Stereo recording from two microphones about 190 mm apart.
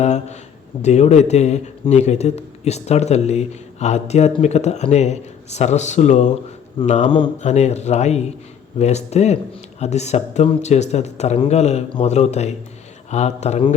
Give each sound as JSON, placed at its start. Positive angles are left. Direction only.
{"t": 0.0, "sound": "speech", "side_deg": 35}